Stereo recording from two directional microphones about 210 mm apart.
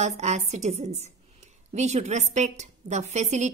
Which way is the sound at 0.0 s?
30° right (ahead or behind).